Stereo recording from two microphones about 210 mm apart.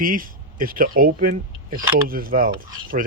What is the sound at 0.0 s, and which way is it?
Speech, 40° right (ahead or behind).